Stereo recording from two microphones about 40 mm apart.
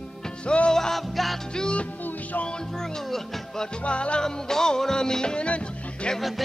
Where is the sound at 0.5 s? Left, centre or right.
Left.